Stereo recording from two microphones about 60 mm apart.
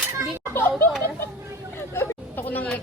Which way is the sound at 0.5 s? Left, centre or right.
Left.